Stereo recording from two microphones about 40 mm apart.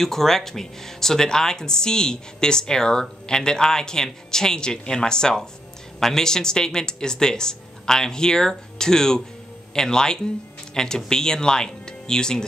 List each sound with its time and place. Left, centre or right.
0.0 s speech: centre